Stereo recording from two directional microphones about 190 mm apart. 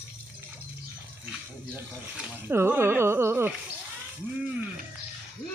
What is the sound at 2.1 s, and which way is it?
Speech, 10° right (ahead or behind).